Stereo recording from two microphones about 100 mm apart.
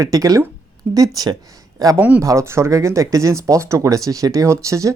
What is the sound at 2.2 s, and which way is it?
Speech, 30° right (ahead or behind).